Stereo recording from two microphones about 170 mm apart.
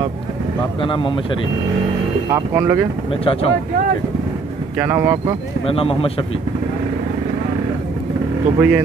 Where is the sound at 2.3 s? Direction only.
20° right (ahead or behind).